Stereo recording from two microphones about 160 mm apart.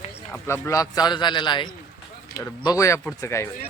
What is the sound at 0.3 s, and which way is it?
A man's voice, 15° left (ahead or behind).